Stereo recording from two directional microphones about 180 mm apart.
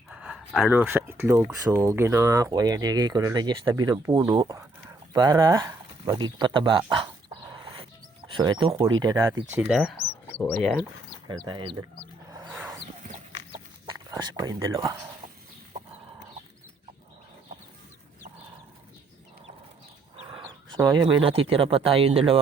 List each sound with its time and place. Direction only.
0.1 s speech: 5° right (ahead or behind); by 6.8 s 25° right (ahead or behind)
8.3 s speech: 25° right (ahead or behind)
9.0 s speech: 20° right (ahead or behind); by 10.8 s centre (ahead or behind)
11.3 s speech: 25° right (ahead or behind)
12.3 s a sound: 15° right (ahead or behind)
13.8 s speech: 25° right (ahead or behind)
20.3 s chicken: 20° right (ahead or behind)
21.2 s speech: 30° right (ahead or behind)